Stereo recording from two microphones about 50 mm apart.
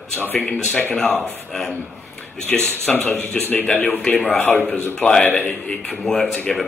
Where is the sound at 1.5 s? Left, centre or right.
Centre.